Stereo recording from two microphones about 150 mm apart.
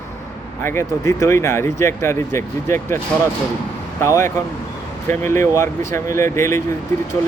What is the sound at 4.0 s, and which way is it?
Speech, 20° left (ahead or behind).